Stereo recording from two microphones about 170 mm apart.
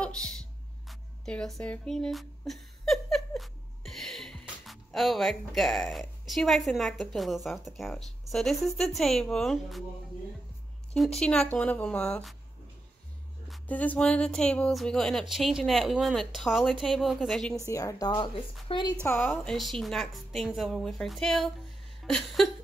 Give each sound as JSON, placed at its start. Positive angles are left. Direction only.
{"t": 0.0, "sound": "speech", "side_deg": 5}
{"t": 10.9, "sound": "speech", "side_deg": 5}
{"t": 13.5, "sound": "speech", "side_deg": 10}
{"t": 17.6, "sound": "a woman's voice", "side_deg": 20}
{"t": 19.0, "sound": "a woman's voice", "side_deg": 10}
{"t": 19.5, "sound": "speech", "side_deg": 0}